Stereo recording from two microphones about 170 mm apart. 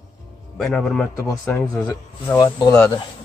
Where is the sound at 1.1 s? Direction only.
20° left (ahead or behind).